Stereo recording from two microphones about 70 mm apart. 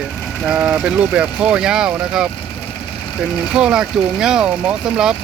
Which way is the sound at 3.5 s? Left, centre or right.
Centre.